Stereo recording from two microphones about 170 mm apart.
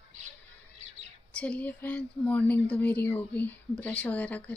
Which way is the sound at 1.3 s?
5° left (ahead or behind).